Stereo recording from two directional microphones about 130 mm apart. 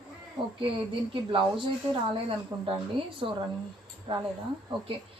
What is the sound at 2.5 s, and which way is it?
Speech, 30° right (ahead or behind).